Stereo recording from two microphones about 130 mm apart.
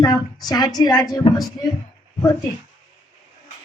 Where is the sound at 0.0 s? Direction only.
30° left (ahead or behind).